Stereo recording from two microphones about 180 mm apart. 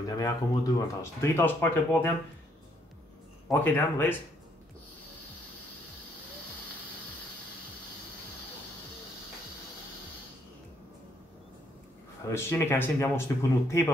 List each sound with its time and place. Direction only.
0.0 s speech: 20° left (ahead or behind)
3.4 s speech: 10° left (ahead or behind)
12.3 s speech: 15° left (ahead or behind)